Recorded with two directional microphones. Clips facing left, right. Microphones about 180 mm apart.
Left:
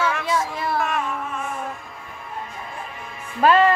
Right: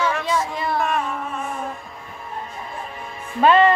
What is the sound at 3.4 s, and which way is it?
Music, centre (ahead or behind).